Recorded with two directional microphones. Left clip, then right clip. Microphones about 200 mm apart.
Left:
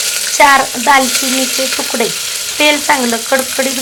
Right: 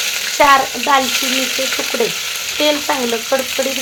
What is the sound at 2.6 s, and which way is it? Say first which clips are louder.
Speech: left 5 dB; 15° left (ahead or behind).